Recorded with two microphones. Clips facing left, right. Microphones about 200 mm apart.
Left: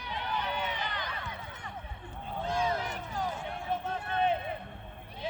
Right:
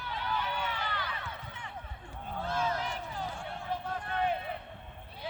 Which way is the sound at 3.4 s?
25° left (ahead or behind).